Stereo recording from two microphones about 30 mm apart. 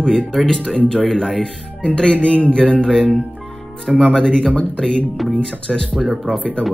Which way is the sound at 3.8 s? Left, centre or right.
Centre.